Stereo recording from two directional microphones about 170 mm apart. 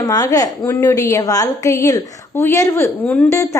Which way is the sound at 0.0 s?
20° left (ahead or behind).